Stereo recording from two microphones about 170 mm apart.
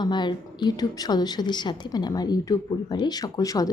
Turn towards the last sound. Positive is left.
turn(degrees=20)  # may be behind; listen again after turning